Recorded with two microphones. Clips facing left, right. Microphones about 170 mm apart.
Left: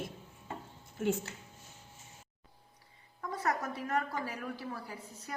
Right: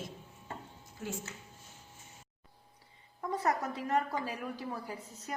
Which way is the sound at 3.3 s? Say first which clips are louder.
Right 2 dB; 15° right (ahead or behind).